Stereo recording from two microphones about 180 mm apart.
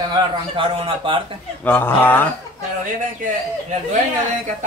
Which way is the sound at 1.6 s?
10° left (ahead or behind).